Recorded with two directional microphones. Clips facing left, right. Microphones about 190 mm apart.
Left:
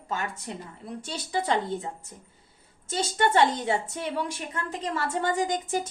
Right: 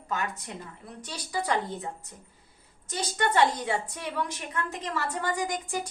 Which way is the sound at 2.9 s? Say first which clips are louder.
Left 3 dB; 25° left (ahead or behind).